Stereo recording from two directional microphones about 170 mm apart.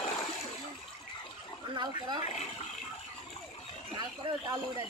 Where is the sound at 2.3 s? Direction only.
40° left (ahead or behind).